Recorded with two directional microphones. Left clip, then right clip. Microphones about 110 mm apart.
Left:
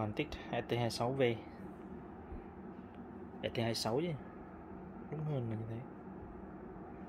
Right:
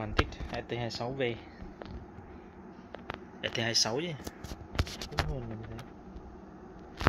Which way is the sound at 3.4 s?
10° left (ahead or behind).